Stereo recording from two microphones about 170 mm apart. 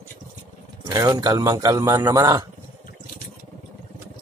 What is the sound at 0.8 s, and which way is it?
A man's voice, 20° right (ahead or behind).